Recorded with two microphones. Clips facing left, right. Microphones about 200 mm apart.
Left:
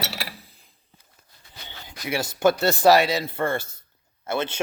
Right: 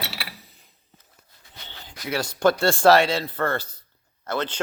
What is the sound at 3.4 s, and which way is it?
Speech, 25° left (ahead or behind).